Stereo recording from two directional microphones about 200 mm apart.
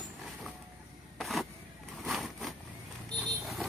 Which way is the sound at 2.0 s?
Centre (ahead or behind).